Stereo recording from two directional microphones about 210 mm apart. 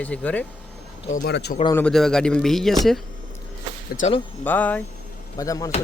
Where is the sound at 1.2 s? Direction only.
50° left (ahead or behind).